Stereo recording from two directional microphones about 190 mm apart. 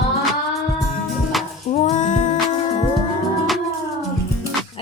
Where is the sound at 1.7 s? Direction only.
40° left (ahead or behind).